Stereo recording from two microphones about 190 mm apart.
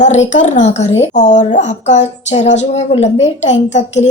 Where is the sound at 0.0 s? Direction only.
35° left (ahead or behind).